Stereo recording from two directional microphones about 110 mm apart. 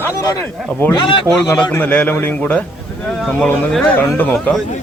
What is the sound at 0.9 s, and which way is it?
Speech, 50° left (ahead or behind).